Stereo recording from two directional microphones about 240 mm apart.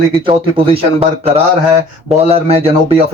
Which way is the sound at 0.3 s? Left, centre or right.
Right.